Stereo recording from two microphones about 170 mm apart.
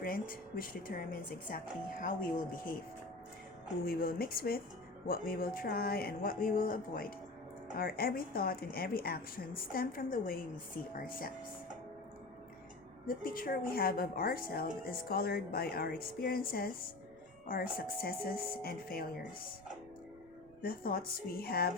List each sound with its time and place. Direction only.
0.0 s a woman's voice: 55° left (ahead or behind)
3.8 s a woman's voice: 60° left (ahead or behind)
13.1 s a woman's voice: 55° left (ahead or behind)
20.6 s a woman's voice: 60° left (ahead or behind)